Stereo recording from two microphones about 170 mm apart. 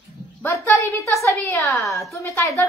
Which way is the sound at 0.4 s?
10° left (ahead or behind).